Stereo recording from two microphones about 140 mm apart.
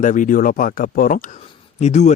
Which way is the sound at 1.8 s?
55° left (ahead or behind).